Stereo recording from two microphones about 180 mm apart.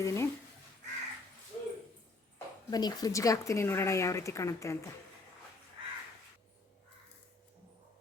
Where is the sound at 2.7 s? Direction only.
20° left (ahead or behind).